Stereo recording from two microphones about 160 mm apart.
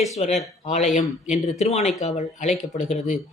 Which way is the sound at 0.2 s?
45° left (ahead or behind).